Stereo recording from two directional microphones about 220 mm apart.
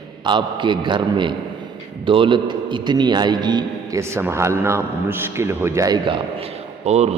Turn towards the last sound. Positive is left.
turn(degrees=-30)  # may be behind; listen again after turning